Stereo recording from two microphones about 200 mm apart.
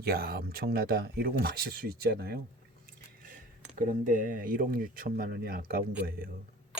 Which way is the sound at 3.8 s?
40° right (ahead or behind).